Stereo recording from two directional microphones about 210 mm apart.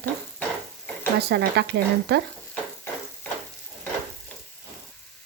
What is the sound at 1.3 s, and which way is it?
Speech, 50° right (ahead or behind).